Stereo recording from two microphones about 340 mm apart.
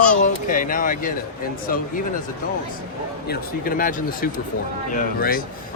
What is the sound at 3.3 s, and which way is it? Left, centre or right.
Speech, left.